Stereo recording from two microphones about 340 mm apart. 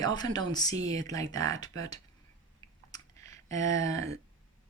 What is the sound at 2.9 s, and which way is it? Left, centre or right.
Clicking, centre.